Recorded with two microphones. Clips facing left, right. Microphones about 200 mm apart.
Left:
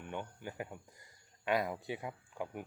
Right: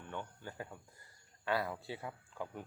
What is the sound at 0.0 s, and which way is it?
Speech, 15° left (ahead or behind).